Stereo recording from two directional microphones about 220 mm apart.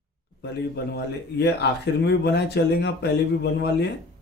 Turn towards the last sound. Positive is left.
turn(degrees=50)  # may be behind; listen again after turning